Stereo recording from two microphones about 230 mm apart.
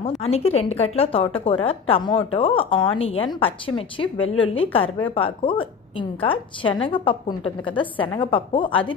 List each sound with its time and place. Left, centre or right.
0.2 s a woman's voice: left